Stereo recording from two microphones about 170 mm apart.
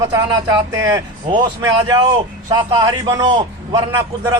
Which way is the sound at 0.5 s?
20° right (ahead or behind).